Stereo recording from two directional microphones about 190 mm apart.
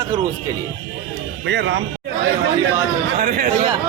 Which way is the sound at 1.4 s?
65° right (ahead or behind).